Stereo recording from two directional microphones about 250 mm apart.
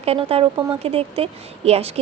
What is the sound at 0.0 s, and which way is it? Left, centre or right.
A woman's voice, right.